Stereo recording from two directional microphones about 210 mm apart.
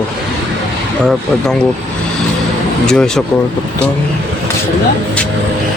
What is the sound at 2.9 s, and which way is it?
Speech, 5° left (ahead or behind).